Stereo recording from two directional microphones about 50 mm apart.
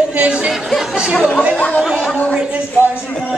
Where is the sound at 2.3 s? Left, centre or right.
Centre.